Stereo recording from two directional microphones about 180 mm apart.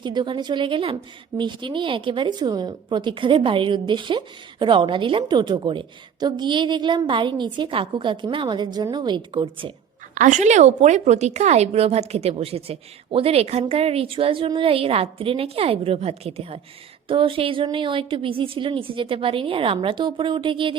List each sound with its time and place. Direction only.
0.0 s a woman's voice: 25° right (ahead or behind)
10.2 s a woman's voice: 40° right (ahead or behind)